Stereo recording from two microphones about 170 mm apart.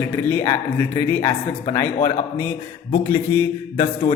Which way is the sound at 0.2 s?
10° left (ahead or behind).